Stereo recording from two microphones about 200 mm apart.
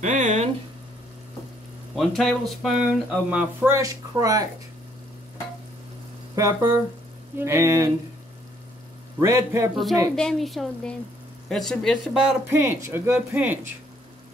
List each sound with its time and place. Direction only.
0.0 s a sound: 40° right (ahead or behind)
2.0 s speech: centre (ahead or behind); by 4.5 s 20° right (ahead or behind)
6.3 s speech: 15° right (ahead or behind)
9.2 s speech: 15° right (ahead or behind)
10.1 s speech: centre (ahead or behind)
12.4 s speech: 10° right (ahead or behind)